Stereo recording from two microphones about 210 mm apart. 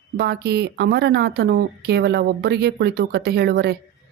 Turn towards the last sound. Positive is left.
turn(degrees=-50)  # may be behind; listen again after turning